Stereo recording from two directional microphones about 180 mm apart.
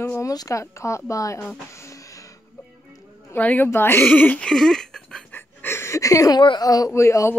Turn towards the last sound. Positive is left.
turn(degrees=15)  # may be behind; listen again after turning